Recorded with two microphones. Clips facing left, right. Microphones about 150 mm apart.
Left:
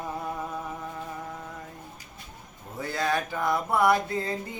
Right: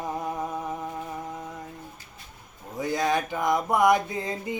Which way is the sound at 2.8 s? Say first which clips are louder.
Right 3 dB; 15° right (ahead or behind).